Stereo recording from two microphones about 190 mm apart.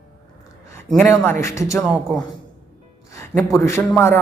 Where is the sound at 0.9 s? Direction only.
Centre (ahead or behind).